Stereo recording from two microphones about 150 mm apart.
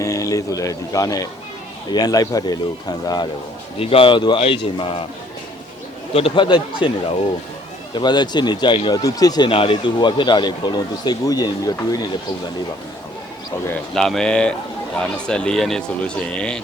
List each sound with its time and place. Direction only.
0.0 s a man's voice: 20° left (ahead or behind)
3.8 s speech: 40° left (ahead or behind)
6.1 s speech: 35° left (ahead or behind)
7.9 s a man's voice: 30° left (ahead or behind)
9.5 s a man's voice: 40° left (ahead or behind)
13.9 s speech: centre (ahead or behind)